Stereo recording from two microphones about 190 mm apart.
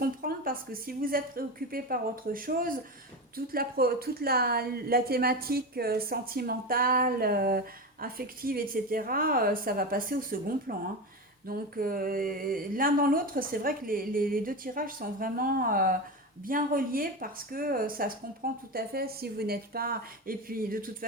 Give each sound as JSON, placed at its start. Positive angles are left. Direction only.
{"t": 0.0, "sound": "speech", "side_deg": -50}